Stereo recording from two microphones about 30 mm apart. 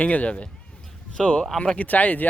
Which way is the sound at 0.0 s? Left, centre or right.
Left.